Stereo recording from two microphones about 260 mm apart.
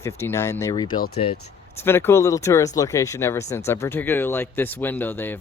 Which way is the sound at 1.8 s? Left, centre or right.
Centre.